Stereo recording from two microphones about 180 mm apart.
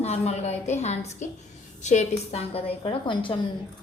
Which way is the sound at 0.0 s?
35° left (ahead or behind).